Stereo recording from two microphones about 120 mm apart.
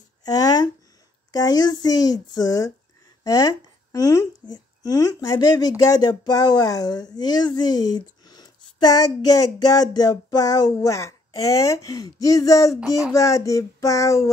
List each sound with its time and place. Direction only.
0.2 s a sound: 30° left (ahead or behind)
1.3 s speech: 35° left (ahead or behind)
13.1 s child singing: 25° left (ahead or behind)